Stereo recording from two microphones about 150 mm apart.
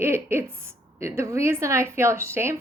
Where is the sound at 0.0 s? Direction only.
15° right (ahead or behind).